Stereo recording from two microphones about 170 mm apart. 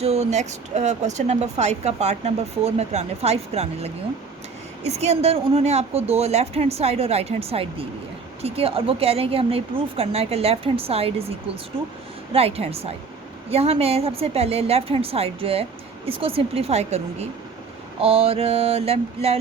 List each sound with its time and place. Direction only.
0.0 s speech: 40° right (ahead or behind)